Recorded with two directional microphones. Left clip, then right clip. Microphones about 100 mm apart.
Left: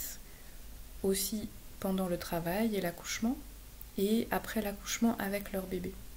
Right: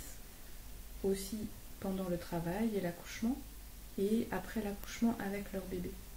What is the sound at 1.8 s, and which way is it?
Speech, 20° left (ahead or behind).